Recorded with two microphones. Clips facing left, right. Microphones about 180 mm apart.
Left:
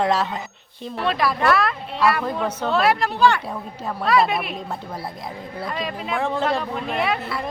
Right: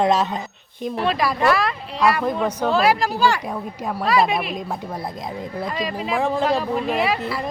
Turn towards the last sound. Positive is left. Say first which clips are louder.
# right 3 dB
turn(degrees=0)  # may be behind; listen again after turning